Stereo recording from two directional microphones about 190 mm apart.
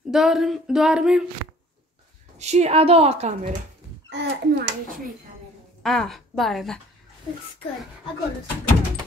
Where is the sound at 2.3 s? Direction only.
35° right (ahead or behind).